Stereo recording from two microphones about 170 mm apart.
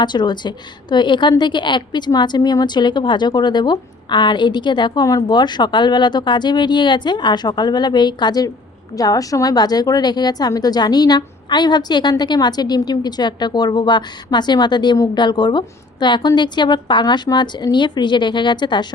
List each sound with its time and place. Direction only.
0.0 s a woman's voice: 25° left (ahead or behind)